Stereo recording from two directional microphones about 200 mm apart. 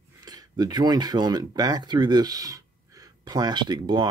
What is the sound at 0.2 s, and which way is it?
Speech, 20° right (ahead or behind).